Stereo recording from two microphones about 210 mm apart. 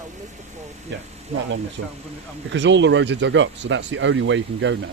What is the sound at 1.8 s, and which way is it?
Speech, 50° right (ahead or behind).